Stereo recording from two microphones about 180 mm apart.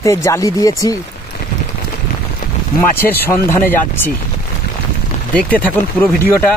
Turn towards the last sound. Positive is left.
turn(degrees=10)  # may be behind; listen again after turning